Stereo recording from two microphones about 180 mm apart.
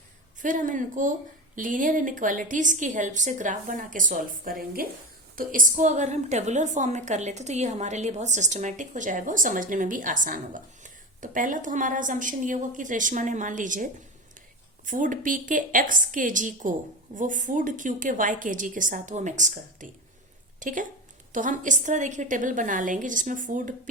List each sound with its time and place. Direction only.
0.3 s a woman's voice: 45° right (ahead or behind)
14.8 s a woman's voice: 45° right (ahead or behind)